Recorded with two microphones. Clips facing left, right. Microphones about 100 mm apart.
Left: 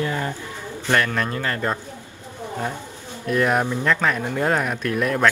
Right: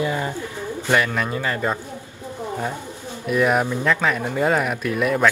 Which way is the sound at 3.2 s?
5° right (ahead or behind).